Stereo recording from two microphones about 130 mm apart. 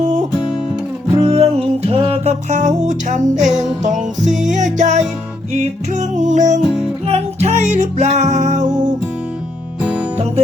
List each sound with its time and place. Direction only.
1.2 s music: 50° right (ahead or behind)
2.5 s music: 70° right (ahead or behind)
4.2 s music: centre (ahead or behind)
4.4 s music: 70° right (ahead or behind)
7.1 s music: 55° right (ahead or behind); by 8.9 s 70° right (ahead or behind)